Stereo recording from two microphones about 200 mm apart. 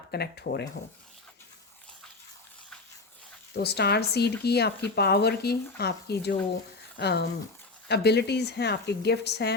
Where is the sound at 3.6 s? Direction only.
55° left (ahead or behind).